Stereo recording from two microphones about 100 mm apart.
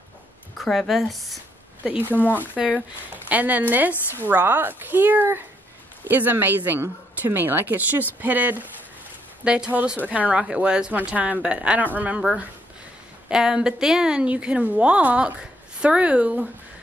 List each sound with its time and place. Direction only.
0.6 s speech: centre (ahead or behind)
1.9 s speech: 20° right (ahead or behind)
2.1 s speech: 20° left (ahead or behind)
2.5 s a woman's voice: 10° right (ahead or behind)
13.3 s speech: 5° right (ahead or behind)